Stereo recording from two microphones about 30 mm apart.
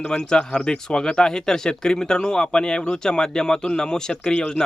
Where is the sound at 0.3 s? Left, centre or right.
Left.